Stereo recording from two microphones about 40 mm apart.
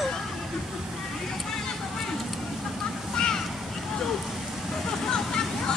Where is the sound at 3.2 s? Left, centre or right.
Centre.